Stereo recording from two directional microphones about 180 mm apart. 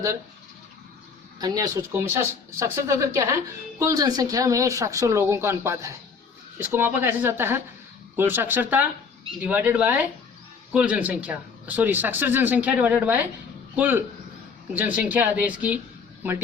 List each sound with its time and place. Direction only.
1.4 s speech: 20° right (ahead or behind)